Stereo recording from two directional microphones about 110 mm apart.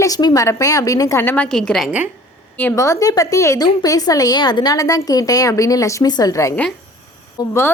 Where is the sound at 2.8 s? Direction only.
30° left (ahead or behind).